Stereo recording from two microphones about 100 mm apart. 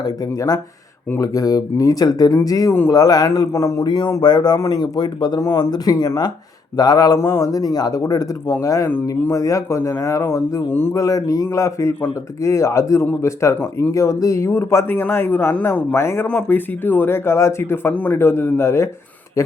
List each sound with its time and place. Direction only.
0.0 s speech: 40° left (ahead or behind)
3.8 s speech: 50° left (ahead or behind); by 10.9 s 20° left (ahead or behind)
10.9 s speech: 35° left (ahead or behind)